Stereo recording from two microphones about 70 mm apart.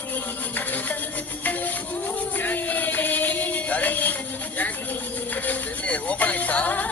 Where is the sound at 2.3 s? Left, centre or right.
Left.